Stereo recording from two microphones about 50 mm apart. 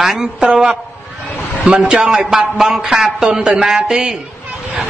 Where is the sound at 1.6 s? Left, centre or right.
Centre.